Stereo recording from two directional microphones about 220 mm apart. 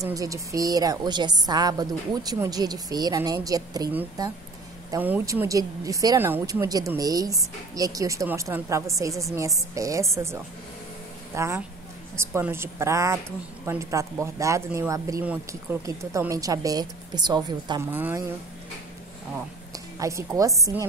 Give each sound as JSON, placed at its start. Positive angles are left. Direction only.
{"t": 0.0, "sound": "speech", "side_deg": -15}
{"t": 20.0, "sound": "speech", "side_deg": -15}